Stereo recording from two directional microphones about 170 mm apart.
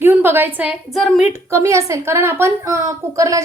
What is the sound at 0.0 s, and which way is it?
A woman's voice, 10° right (ahead or behind).